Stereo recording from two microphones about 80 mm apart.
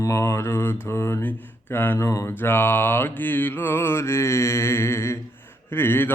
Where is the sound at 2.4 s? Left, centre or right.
Left.